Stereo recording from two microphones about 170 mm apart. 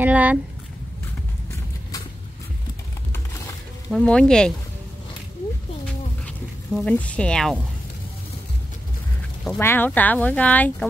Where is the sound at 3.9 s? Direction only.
5° left (ahead or behind).